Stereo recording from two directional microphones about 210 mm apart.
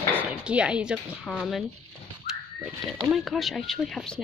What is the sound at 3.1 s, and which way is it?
A woman's voice, centre (ahead or behind).